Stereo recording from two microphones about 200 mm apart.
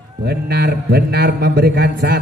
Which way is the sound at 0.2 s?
55° right (ahead or behind).